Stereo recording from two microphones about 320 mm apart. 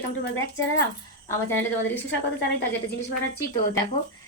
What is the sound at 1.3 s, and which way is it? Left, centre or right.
Speech, centre.